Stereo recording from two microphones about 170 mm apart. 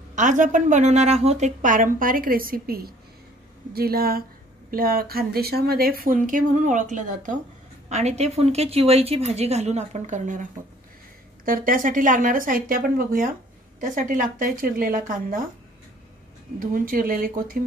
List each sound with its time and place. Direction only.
0.1 s a woman's voice: 45° right (ahead or behind)
16.5 s speech: 55° right (ahead or behind)